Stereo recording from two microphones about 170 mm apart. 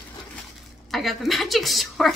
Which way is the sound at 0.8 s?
Centre (ahead or behind).